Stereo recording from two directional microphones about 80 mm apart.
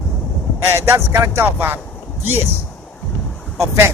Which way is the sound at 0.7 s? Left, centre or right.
Right.